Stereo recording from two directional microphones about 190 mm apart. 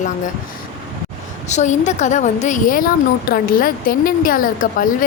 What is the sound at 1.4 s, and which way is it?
A woman's voice, 40° left (ahead or behind).